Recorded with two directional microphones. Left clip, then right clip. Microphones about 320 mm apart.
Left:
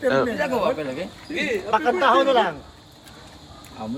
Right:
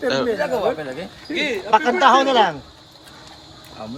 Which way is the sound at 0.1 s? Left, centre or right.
Centre.